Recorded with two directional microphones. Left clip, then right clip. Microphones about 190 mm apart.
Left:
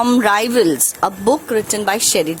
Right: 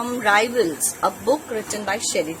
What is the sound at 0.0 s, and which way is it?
Speech, 50° left (ahead or behind).